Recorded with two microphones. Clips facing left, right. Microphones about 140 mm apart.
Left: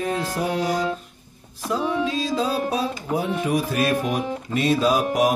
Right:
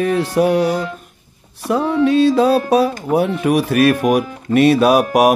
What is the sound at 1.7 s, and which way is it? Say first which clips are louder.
Speech: right 8 dB; 65° right (ahead or behind).